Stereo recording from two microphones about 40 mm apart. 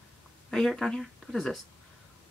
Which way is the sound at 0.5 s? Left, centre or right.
Centre.